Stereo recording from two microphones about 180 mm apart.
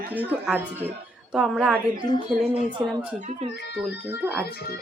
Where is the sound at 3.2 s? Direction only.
40° right (ahead or behind).